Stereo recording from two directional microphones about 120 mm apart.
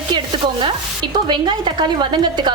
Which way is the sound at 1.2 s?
40° right (ahead or behind).